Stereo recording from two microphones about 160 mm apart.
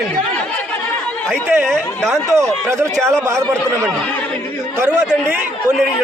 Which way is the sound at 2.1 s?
20° right (ahead or behind).